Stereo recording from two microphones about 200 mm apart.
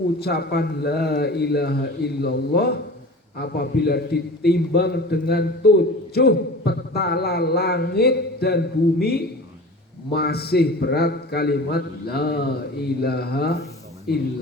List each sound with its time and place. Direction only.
0.2 s a man's voice: 55° left (ahead or behind)